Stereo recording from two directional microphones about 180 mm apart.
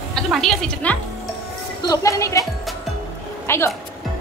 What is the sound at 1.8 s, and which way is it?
Speech, 20° left (ahead or behind).